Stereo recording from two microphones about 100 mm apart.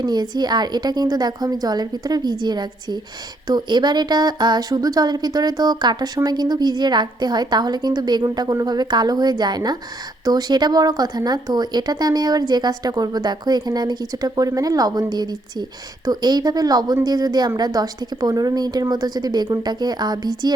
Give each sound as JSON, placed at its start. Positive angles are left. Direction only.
{"t": 0.0, "sound": "speech", "side_deg": -45}